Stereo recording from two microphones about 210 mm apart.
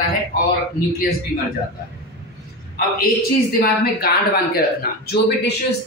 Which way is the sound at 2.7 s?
45° left (ahead or behind).